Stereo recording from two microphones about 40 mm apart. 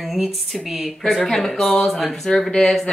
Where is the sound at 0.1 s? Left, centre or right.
Centre.